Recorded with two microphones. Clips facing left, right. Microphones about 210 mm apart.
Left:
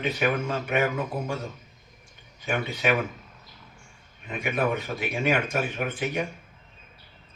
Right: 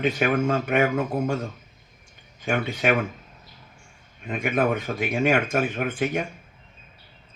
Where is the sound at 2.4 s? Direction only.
50° right (ahead or behind).